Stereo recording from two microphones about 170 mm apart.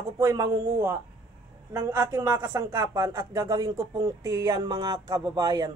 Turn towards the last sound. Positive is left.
turn(degrees=-20)  # may be behind; listen again after turning